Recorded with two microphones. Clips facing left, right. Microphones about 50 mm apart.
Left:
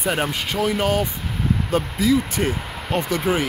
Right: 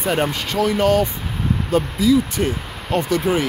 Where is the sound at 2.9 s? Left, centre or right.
Left.